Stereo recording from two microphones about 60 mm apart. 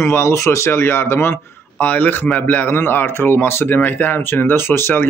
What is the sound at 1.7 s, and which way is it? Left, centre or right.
Speech, left.